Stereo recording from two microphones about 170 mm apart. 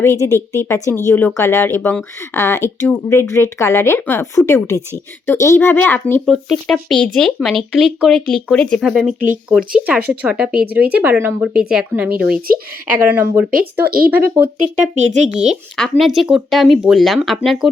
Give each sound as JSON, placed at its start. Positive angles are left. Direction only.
{"t": 0.0, "sound": "a woman's voice", "side_deg": 15}
{"t": 6.2, "sound": "speech", "side_deg": 0}
{"t": 13.8, "sound": "speech", "side_deg": -60}
{"t": 14.1, "sound": "speech", "side_deg": -10}